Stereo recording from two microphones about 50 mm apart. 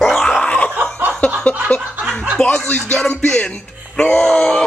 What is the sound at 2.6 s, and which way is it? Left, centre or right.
Music, left.